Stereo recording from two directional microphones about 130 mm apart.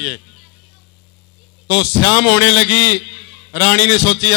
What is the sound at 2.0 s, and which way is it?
A man's voice, 25° left (ahead or behind).